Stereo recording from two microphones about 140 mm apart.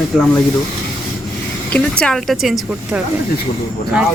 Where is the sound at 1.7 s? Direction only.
5° left (ahead or behind).